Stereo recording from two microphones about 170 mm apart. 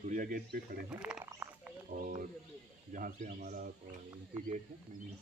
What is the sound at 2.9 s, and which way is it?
Speech, 55° right (ahead or behind).